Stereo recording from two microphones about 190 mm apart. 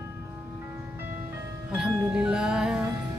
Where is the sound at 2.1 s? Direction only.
5° right (ahead or behind).